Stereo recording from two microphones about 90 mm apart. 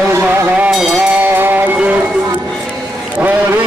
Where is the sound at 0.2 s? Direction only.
20° right (ahead or behind).